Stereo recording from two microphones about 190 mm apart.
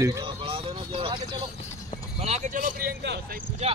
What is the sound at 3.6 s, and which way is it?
Speech, 35° right (ahead or behind).